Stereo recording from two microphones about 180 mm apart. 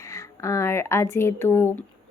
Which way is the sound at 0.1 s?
15° left (ahead or behind).